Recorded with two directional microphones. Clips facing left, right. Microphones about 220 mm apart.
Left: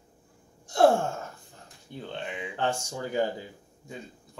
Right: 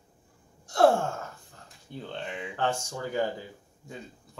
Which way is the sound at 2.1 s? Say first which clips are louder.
Left 1 dB; 5° left (ahead or behind).